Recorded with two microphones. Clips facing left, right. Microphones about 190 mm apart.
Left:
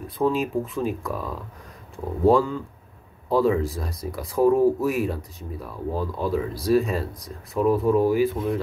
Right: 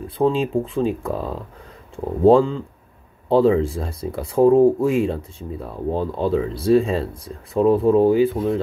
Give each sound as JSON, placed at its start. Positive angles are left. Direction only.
{"t": 0.0, "sound": "speech", "side_deg": -30}